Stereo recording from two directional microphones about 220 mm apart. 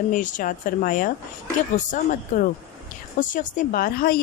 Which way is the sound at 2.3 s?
35° left (ahead or behind).